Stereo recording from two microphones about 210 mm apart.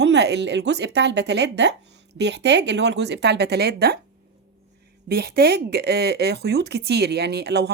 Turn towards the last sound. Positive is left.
turn(degrees=-50)  # may be behind; listen again after turning